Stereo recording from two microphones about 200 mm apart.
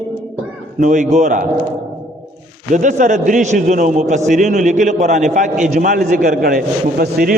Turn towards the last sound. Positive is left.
turn(degrees=-45)  # may be behind; listen again after turning